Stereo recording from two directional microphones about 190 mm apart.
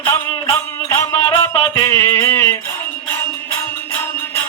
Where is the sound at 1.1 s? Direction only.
25° left (ahead or behind).